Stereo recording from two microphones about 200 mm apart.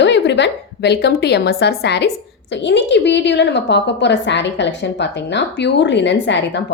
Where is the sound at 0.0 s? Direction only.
60° left (ahead or behind).